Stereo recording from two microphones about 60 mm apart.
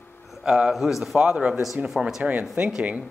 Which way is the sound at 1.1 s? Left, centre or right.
Centre.